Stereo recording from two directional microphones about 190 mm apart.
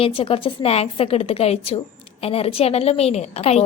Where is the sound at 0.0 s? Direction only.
30° left (ahead or behind).